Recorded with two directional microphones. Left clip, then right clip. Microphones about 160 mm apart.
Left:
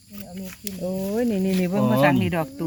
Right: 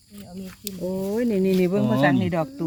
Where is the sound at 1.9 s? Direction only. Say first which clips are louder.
Left 1 dB; 45° right (ahead or behind).